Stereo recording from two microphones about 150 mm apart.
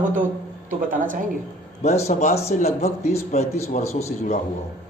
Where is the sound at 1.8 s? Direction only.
45° left (ahead or behind).